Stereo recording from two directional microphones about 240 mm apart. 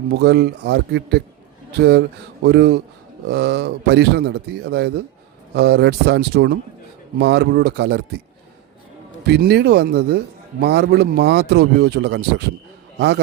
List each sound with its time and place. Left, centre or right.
0.2 s speech: right
9.2 s speech: right